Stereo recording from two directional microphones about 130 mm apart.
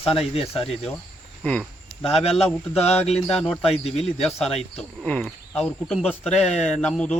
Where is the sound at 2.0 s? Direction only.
50° left (ahead or behind).